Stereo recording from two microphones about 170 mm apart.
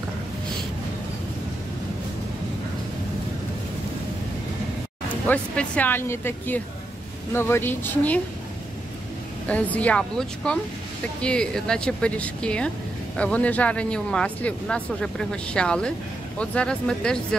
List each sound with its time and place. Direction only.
5.2 s speech: 10° left (ahead or behind)
9.5 s speech: 10° left (ahead or behind)